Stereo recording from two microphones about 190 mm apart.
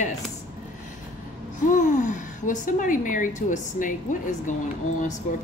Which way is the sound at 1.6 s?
40° left (ahead or behind).